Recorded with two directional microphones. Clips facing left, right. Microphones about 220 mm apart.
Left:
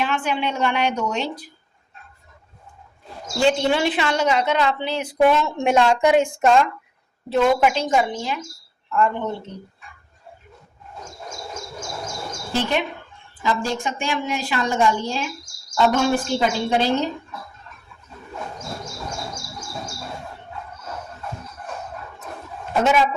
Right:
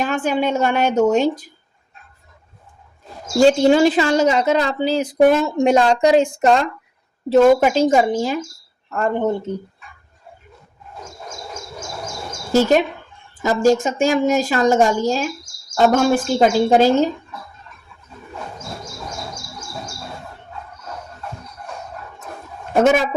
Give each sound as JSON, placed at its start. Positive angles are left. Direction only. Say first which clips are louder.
{"t": 0.0, "sound": "a woman's voice", "louder": "right 4 dB", "side_deg": -45}
{"t": 3.3, "sound": "a woman's voice", "louder": "right 7 dB", "side_deg": -40}
{"t": 12.5, "sound": "a woman's voice", "louder": "right 9 dB", "side_deg": -40}
{"t": 22.7, "sound": "a woman's voice", "louder": "right 4 dB", "side_deg": -50}